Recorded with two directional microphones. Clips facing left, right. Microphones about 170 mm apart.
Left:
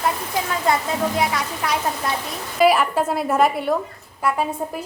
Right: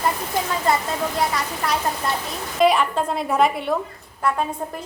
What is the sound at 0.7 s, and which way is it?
A woman's voice, centre (ahead or behind).